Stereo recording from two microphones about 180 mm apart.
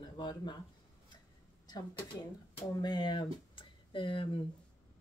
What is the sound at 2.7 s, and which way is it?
Speech, 20° left (ahead or behind).